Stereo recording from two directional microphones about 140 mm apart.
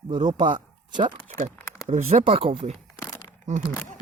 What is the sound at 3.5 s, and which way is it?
Speech, 60° right (ahead or behind).